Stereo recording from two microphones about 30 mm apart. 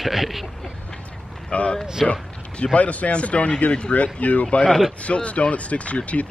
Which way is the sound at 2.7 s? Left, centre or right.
Left.